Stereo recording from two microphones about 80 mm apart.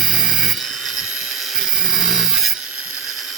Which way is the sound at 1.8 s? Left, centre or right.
Centre.